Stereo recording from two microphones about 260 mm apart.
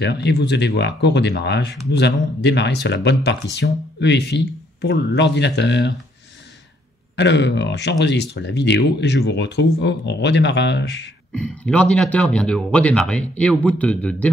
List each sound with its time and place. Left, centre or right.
0.0 s speech: left
7.2 s speech: left
11.3 s speech: centre